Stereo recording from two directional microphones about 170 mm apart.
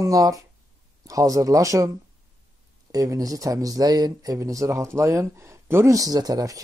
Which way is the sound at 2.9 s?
20° right (ahead or behind).